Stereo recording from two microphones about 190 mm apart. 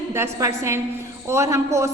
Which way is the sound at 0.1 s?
15° right (ahead or behind).